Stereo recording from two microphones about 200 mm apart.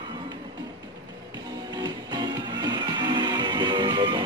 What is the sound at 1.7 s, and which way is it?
Music, 20° right (ahead or behind).